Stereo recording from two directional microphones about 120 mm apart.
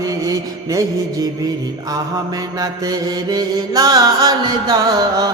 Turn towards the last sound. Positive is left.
turn(degrees=-35)  # may be behind; listen again after turning